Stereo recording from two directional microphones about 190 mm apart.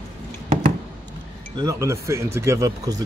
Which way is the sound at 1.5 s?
15° right (ahead or behind).